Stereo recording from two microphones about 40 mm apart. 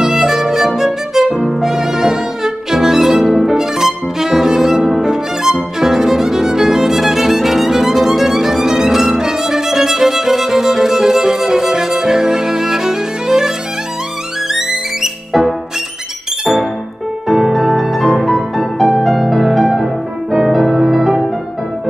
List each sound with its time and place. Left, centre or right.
0.0 s violin: centre
1.3 s music: centre
5.0 s violin: centre
14.5 s music: centre
17.3 s music: centre